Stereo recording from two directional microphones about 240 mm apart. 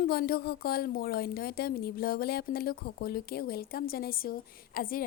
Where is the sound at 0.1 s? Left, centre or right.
Left.